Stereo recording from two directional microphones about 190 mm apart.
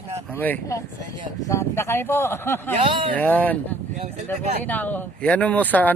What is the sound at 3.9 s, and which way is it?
Speech, 35° right (ahead or behind).